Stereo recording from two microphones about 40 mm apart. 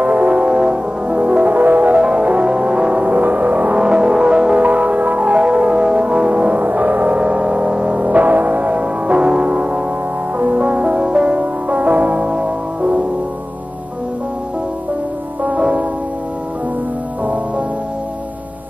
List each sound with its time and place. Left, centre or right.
0.0 s music: right
0.5 s music: right
3.7 s music: right
4.6 s music: right
7.2 s music: right
8.0 s music: right
15.4 s music: right
17.2 s music: right